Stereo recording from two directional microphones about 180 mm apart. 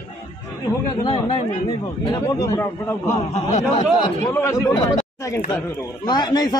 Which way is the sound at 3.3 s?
40° left (ahead or behind).